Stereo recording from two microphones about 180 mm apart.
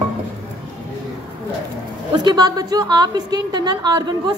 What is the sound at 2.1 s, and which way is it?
A woman's voice, 25° right (ahead or behind).